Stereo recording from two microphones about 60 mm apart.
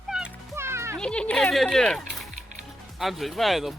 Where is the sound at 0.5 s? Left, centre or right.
Right.